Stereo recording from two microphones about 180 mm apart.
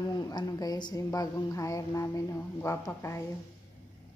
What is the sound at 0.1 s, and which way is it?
Speech, 20° left (ahead or behind).